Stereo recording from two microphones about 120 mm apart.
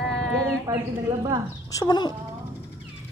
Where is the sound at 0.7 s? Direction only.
30° right (ahead or behind).